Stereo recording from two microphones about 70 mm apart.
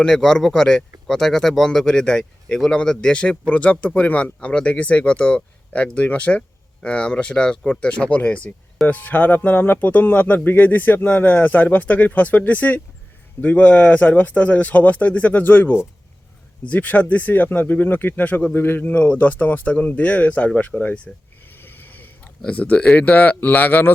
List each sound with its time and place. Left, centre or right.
0.0 s speech: centre
21.5 s a sound: left
22.4 s speech: left